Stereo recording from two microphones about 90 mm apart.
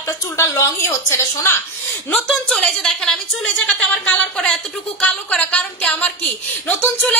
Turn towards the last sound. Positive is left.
turn(degrees=20)  # may be behind; listen again after turning